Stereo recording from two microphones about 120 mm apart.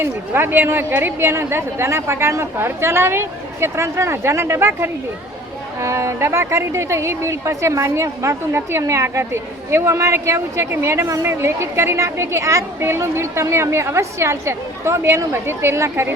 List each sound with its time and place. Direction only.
0.0 s speech: 20° right (ahead or behind)